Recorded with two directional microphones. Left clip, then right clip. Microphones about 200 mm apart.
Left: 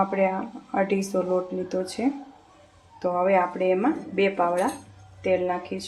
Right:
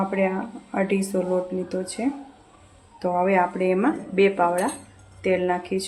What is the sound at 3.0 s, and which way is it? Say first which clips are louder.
Speech: right 1 dB; 10° right (ahead or behind).